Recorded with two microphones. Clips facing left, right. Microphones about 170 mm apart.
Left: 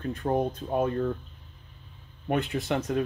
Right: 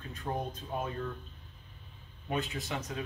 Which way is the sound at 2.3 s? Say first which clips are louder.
Left 8 dB; 60° left (ahead or behind).